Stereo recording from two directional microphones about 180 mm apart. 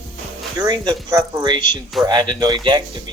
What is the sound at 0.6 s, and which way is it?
Speech, 20° right (ahead or behind).